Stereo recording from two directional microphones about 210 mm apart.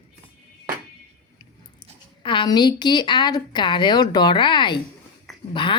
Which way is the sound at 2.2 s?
20° left (ahead or behind).